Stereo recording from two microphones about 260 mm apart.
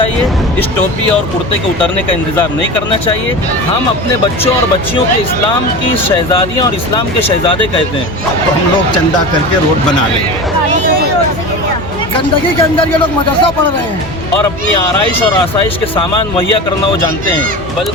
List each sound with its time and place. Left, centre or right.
12.8 s speech: centre